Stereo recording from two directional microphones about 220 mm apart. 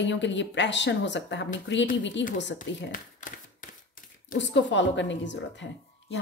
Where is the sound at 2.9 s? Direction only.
40° left (ahead or behind).